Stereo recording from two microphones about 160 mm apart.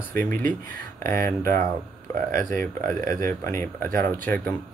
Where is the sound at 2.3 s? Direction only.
60° right (ahead or behind).